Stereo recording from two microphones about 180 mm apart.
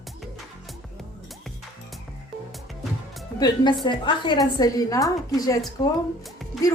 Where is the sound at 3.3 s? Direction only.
25° left (ahead or behind).